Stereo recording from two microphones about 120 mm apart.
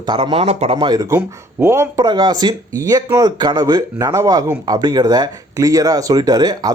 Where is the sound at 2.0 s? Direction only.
35° right (ahead or behind).